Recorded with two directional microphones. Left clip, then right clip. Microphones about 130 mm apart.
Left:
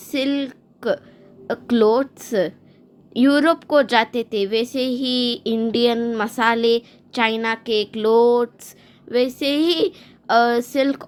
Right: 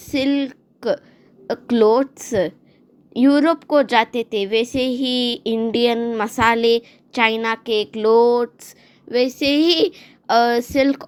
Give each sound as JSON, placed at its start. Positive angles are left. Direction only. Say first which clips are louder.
{"t": 0.0, "sound": "a woman's voice", "louder": "right 2 dB", "side_deg": -15}
{"t": 3.1, "sound": "a woman's voice", "louder": "right 1 dB", "side_deg": -5}